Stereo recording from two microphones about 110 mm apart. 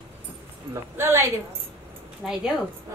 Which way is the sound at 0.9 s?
20° right (ahead or behind).